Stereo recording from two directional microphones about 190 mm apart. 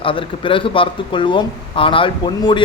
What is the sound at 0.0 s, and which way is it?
Speech, 30° left (ahead or behind).